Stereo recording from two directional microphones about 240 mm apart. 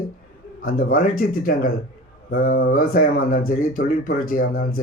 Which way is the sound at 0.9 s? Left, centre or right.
Left.